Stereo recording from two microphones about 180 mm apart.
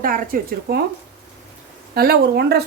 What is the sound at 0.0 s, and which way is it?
Speech, 50° right (ahead or behind).